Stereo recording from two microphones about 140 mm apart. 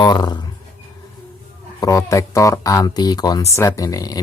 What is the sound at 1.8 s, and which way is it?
Speech, 25° left (ahead or behind).